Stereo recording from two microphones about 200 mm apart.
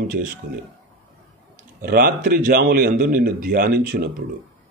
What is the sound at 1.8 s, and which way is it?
Speech, 50° right (ahead or behind).